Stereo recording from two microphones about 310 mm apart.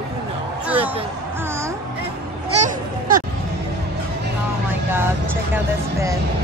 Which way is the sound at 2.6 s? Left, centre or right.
Right.